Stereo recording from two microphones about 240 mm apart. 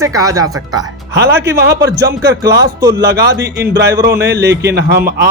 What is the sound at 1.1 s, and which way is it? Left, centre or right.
Speech, right.